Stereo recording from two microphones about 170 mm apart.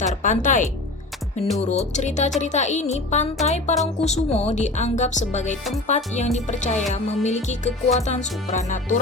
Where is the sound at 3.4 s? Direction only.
40° left (ahead or behind).